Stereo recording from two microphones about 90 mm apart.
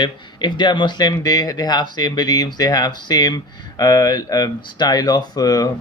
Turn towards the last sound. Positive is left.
turn(degrees=45)  # may be behind; listen again after turning